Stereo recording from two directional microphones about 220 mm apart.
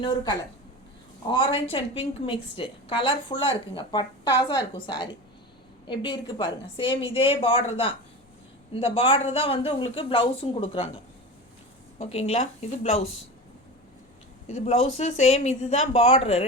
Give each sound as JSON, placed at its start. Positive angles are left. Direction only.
{"t": 1.3, "sound": "a woman's voice", "side_deg": 20}
{"t": 11.9, "sound": "a woman's voice", "side_deg": 30}
{"t": 14.4, "sound": "a woman's voice", "side_deg": 30}